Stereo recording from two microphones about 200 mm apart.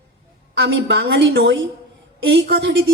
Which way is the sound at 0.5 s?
55° right (ahead or behind).